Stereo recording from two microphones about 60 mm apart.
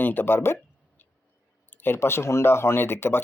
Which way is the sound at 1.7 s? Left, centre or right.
Left.